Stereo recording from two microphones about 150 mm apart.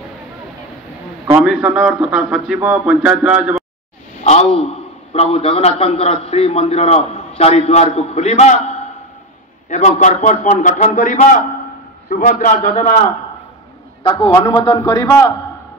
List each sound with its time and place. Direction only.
1.4 s a man's voice: 5° right (ahead or behind)
4.2 s a sound: 50° left (ahead or behind)
5.1 s a man's voice: 40° left (ahead or behind); by 11.4 s 60° left (ahead or behind)
12.1 s a man's voice: 80° left; by 13.1 s 55° left (ahead or behind)
14.0 s a man's voice: 30° left (ahead or behind)